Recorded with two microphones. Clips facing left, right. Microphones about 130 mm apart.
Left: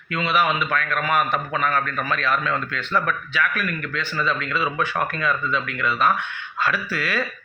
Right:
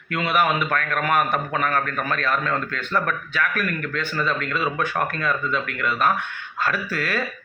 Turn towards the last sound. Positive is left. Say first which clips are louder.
# even
turn(degrees=-45)  # may be behind; listen again after turning